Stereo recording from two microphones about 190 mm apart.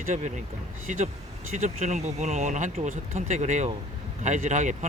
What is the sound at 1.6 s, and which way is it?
Speech, 40° right (ahead or behind).